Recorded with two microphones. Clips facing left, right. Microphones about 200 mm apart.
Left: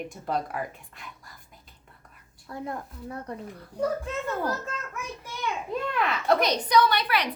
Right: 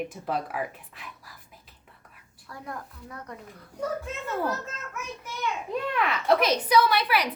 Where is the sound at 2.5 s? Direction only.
25° left (ahead or behind).